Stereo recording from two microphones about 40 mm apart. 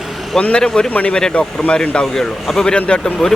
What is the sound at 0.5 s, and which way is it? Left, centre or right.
Speech, centre.